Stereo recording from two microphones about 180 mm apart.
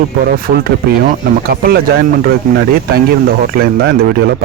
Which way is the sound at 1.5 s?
55° right (ahead or behind).